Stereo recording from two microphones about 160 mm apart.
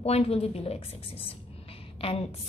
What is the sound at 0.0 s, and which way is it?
A woman's voice, 40° left (ahead or behind).